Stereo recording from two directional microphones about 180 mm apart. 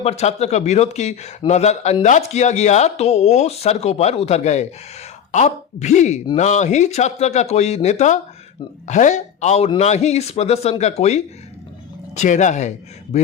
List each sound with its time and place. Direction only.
0.0 s speech: 35° left (ahead or behind)